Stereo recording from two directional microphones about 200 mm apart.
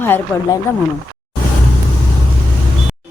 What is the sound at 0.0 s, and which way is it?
Speech, 10° left (ahead or behind).